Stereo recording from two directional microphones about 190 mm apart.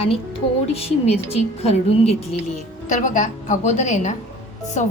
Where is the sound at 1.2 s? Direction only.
30° left (ahead or behind).